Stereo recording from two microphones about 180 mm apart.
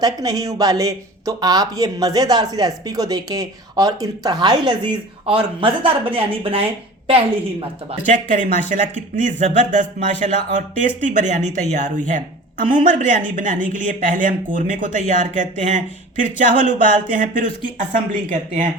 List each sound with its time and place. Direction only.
0.0 s a woman's voice: 20° right (ahead or behind); by 18.7 s 45° right (ahead or behind)